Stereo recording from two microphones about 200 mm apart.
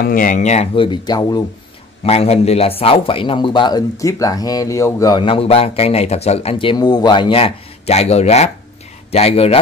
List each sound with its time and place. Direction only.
0.0 s speech: 45° left (ahead or behind); by 1.4 s 20° left (ahead or behind)
2.0 s a man's voice: 30° left (ahead or behind)